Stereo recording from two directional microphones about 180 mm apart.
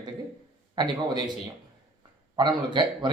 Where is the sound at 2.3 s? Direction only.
25° right (ahead or behind).